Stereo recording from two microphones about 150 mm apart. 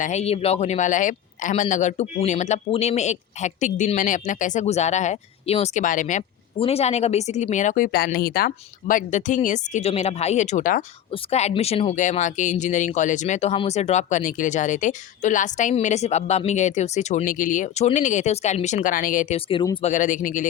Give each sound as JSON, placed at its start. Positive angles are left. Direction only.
{"t": 0.0, "sound": "a man's voice", "side_deg": 50}
{"t": 6.6, "sound": "speech", "side_deg": 40}
{"t": 11.1, "sound": "a man's voice", "side_deg": 45}
{"t": 12.0, "sound": "a man's voice", "side_deg": 55}